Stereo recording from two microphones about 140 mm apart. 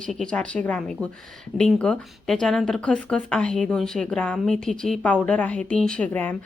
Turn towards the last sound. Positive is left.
turn(degrees=10)  # may be behind; listen again after turning